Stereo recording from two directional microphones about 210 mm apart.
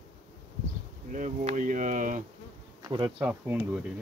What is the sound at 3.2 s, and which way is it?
Speech, 10° right (ahead or behind).